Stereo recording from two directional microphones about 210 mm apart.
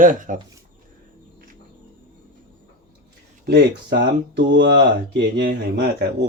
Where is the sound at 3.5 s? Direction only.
55° right (ahead or behind).